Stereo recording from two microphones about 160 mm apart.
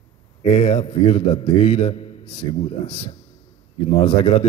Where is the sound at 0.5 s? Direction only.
35° left (ahead or behind).